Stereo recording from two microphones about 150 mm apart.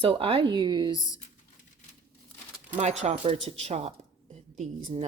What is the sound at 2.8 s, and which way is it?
Speech, 50° right (ahead or behind).